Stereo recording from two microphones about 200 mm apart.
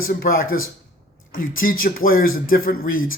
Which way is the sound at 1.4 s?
45° left (ahead or behind).